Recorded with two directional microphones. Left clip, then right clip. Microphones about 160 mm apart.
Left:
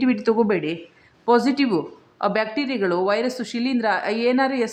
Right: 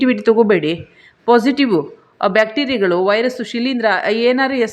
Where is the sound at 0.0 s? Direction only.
15° right (ahead or behind).